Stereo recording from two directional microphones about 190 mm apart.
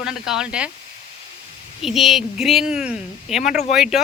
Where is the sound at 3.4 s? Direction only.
40° left (ahead or behind).